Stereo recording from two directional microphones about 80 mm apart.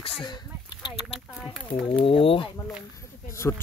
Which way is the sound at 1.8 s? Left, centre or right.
Left.